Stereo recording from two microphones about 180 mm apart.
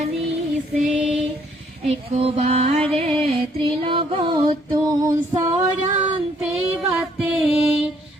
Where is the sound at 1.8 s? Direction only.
35° right (ahead or behind); by 5.5 s 20° right (ahead or behind).